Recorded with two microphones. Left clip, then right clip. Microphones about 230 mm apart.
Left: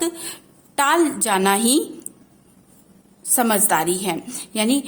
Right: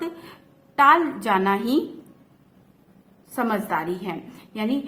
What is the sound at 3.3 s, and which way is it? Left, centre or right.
A woman's voice, left.